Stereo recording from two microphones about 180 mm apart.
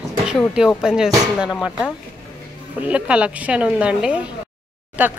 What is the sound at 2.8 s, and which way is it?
A woman's voice, 5° right (ahead or behind).